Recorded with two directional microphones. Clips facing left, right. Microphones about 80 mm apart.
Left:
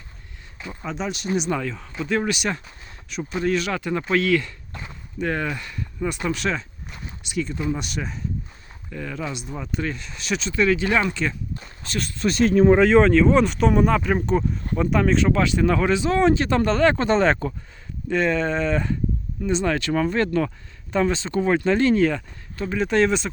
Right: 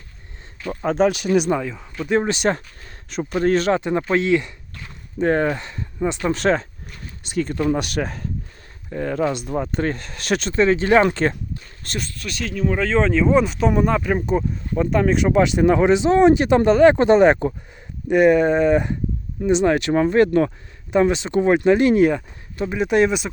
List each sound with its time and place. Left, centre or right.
0.7 s speech: right
1.5 s speech: centre
2.0 s speech: right
2.3 s speech: right
3.8 s speech: right
5.2 s speech: right
6.2 s speech: right
7.5 s speech: right
8.9 s speech: right
10.5 s speech: right
12.1 s speech: left
12.7 s speech: centre
13.0 s speech: centre